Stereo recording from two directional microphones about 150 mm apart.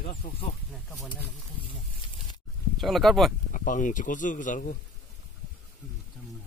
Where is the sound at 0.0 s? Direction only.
65° left (ahead or behind).